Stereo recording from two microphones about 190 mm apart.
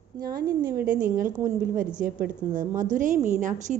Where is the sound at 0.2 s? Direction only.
50° right (ahead or behind).